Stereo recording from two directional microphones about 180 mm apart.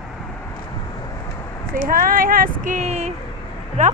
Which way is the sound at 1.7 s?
50° right (ahead or behind).